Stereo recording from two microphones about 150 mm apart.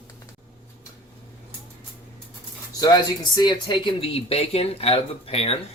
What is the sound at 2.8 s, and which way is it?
Speech, 25° left (ahead or behind).